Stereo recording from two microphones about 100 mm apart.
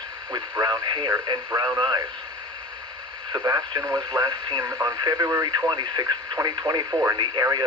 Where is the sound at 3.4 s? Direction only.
40° right (ahead or behind).